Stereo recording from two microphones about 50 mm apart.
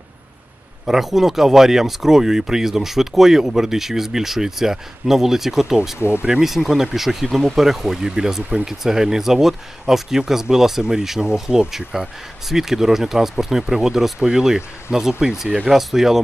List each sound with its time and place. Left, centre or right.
0.8 s speech: centre
5.9 s speech: left
6.4 s speech: centre